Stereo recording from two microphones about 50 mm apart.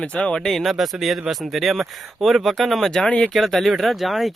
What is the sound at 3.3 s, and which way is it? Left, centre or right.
Speech, centre.